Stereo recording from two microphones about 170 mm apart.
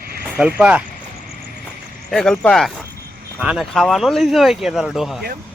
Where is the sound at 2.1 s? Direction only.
5° left (ahead or behind).